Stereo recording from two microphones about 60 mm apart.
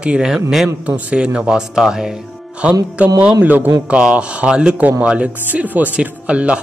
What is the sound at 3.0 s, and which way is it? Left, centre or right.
Speech, right.